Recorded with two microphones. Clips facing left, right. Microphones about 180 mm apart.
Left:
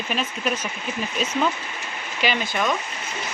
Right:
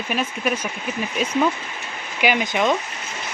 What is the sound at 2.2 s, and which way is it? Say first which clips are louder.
Speech: right 4 dB; 15° right (ahead or behind).